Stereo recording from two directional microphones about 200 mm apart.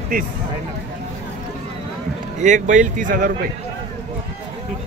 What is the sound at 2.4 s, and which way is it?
Speech, 35° right (ahead or behind).